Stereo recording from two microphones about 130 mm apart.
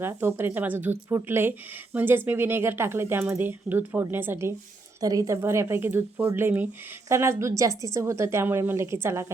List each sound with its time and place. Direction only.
0.0 s a woman's voice: 20° right (ahead or behind)